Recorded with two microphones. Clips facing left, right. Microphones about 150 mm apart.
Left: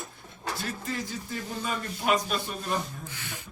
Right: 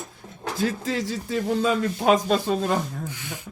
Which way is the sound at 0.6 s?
90° right.